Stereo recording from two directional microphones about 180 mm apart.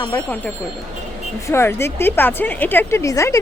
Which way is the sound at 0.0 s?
10° left (ahead or behind).